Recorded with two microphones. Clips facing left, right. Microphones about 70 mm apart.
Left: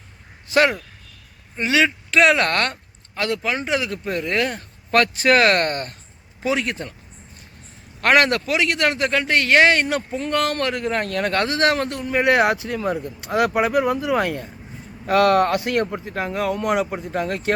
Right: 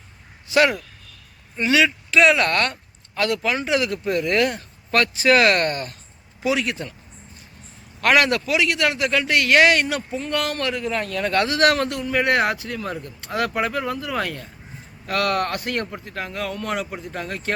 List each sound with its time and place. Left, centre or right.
0.4 s a man's voice: left
2.0 s speech: left
3.2 s a man's voice: left
4.5 s speech: left
8.0 s a man's voice: left; by 17.5 s centre